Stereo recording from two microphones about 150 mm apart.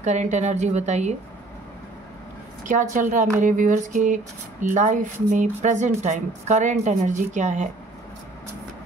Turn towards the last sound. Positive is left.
turn(degrees=-55)  # may be behind; listen again after turning